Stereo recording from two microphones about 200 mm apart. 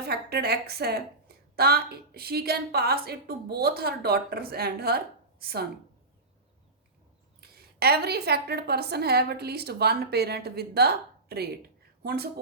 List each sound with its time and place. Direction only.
0.0 s a woman's voice: 50° right (ahead or behind)
7.8 s a woman's voice: 50° right (ahead or behind)